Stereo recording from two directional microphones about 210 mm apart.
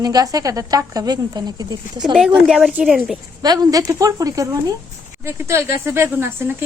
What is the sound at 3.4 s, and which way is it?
A woman's voice, 20° right (ahead or behind).